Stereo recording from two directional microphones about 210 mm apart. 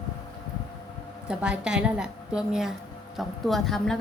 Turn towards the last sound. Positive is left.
turn(degrees=0)  # may be behind; listen again after turning